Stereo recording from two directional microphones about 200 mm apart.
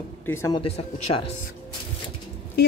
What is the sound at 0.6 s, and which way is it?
Speech, 30° left (ahead or behind).